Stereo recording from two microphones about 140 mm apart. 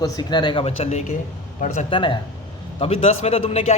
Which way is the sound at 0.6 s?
50° left (ahead or behind).